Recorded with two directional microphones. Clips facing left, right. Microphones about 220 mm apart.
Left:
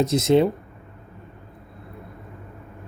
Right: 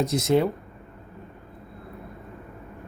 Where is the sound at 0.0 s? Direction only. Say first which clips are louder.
Left 4 dB; 25° left (ahead or behind).